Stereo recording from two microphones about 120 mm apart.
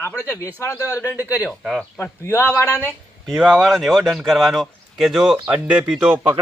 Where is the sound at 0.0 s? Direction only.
20° left (ahead or behind).